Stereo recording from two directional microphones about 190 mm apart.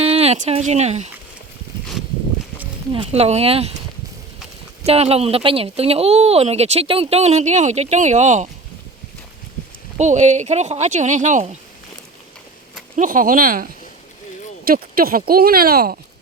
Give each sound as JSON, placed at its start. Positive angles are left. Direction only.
{"t": 0.0, "sound": "speech", "side_deg": -30}
{"t": 2.9, "sound": "speech", "side_deg": -30}
{"t": 4.9, "sound": "speech", "side_deg": -30}
{"t": 10.0, "sound": "speech", "side_deg": -40}
{"t": 13.0, "sound": "speech", "side_deg": -45}
{"t": 14.7, "sound": "speech", "side_deg": -50}